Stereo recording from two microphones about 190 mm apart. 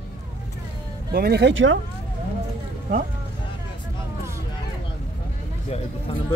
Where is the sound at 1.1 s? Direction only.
55° right (ahead or behind); by 1.8 s 80° right.